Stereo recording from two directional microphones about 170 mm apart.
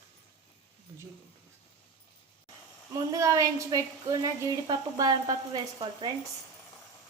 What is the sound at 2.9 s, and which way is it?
A woman's voice, 20° right (ahead or behind).